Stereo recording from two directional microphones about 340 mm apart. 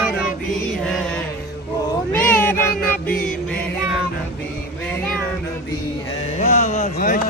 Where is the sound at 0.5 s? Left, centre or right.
Centre.